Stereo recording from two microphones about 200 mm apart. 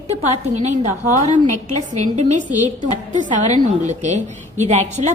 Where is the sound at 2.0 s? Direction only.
35° right (ahead or behind).